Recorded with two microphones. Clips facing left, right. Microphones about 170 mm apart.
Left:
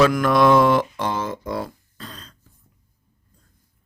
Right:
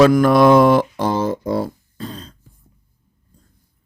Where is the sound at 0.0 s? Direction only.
35° right (ahead or behind).